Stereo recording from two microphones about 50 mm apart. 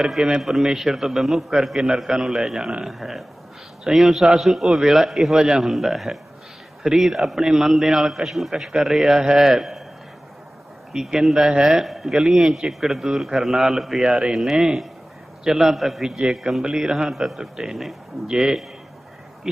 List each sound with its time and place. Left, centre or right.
0.0 s a man's voice: centre
5.4 s a man's voice: centre
5.6 s a man's voice: centre
10.9 s a man's voice: centre
14.0 s a man's voice: centre